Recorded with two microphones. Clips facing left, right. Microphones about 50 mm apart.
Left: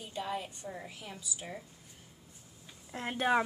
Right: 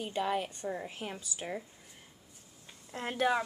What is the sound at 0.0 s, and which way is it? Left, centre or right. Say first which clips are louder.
A woman's voice: right 5 dB; right.